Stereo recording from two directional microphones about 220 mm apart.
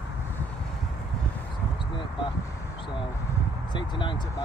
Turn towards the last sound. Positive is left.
turn(degrees=20)  # may be behind; listen again after turning